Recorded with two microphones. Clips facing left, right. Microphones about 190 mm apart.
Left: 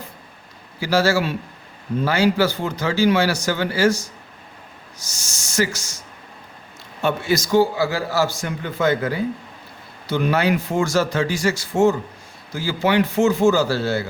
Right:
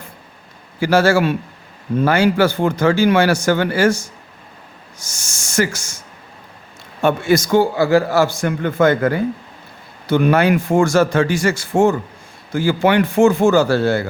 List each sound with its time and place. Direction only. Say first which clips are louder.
0.8 s a man's voice: right 5 dB; 55° right (ahead or behind)
5.0 s a man's voice: right 2 dB; 50° right (ahead or behind)
7.0 s a man's voice: right 5 dB; 50° right (ahead or behind)